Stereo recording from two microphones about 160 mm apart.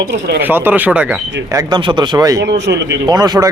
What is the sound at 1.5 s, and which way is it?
Speech, 25° right (ahead or behind).